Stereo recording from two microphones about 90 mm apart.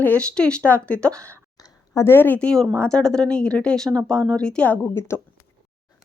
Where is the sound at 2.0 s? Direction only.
25° left (ahead or behind).